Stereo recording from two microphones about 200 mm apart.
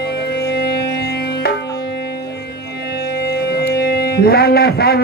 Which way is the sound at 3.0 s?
55° left (ahead or behind).